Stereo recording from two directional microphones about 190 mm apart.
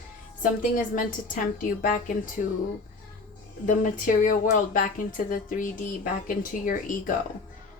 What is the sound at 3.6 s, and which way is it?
A woman's voice, 45° left (ahead or behind).